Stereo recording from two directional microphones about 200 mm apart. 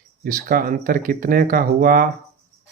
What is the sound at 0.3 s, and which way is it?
Speech, 45° right (ahead or behind).